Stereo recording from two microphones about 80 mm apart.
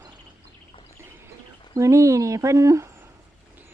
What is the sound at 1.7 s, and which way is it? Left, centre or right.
Speech, right.